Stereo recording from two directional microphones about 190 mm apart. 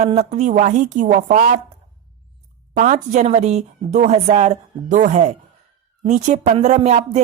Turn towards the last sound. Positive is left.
turn(degrees=-35)  # may be behind; listen again after turning